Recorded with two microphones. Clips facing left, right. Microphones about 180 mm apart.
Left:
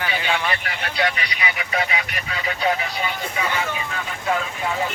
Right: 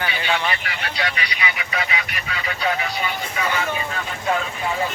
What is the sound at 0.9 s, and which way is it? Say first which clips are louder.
Speech: left 4 dB; 45° left (ahead or behind).